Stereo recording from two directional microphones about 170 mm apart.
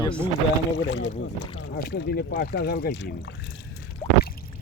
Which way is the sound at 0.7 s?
90° left.